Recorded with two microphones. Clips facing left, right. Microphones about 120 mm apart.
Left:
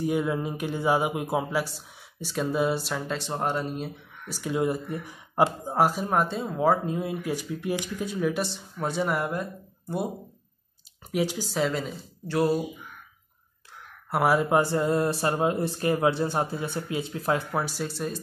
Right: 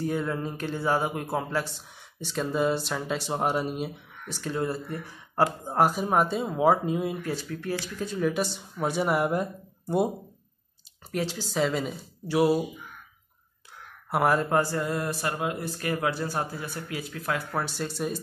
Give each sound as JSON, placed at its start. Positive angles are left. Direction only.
{"t": 0.0, "sound": "speech", "side_deg": 15}
{"t": 4.3, "sound": "speech", "side_deg": 10}
{"t": 5.7, "sound": "speech", "side_deg": 0}
{"t": 7.2, "sound": "speech", "side_deg": 15}
{"t": 11.1, "sound": "speech", "side_deg": 10}
{"t": 11.4, "sound": "speech", "side_deg": 0}
{"t": 14.1, "sound": "speech", "side_deg": 5}
{"t": 17.5, "sound": "speech", "side_deg": 10}